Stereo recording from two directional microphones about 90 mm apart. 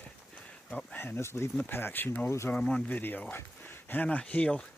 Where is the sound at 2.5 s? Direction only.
15° left (ahead or behind).